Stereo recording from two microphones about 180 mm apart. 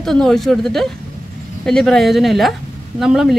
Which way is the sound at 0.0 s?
Centre (ahead or behind).